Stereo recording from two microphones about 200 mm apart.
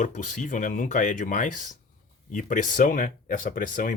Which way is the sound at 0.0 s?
40° left (ahead or behind).